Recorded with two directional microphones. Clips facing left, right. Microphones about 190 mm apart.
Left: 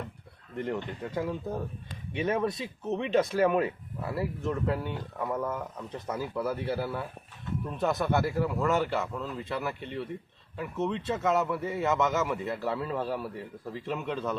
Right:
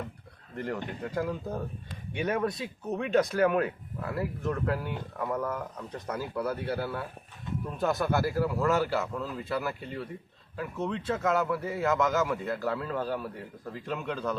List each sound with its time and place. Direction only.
0.5 s speech: centre (ahead or behind)
2.8 s speech: 25° left (ahead or behind)
3.3 s speech: 5° left (ahead or behind)